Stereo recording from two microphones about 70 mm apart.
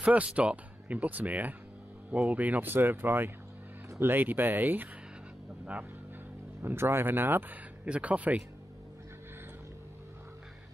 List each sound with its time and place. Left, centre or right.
0.0 s speech: centre
6.6 s speech: right
7.8 s speech: centre